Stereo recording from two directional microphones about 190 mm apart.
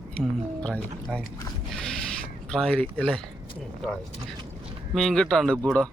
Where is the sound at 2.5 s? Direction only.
5° left (ahead or behind).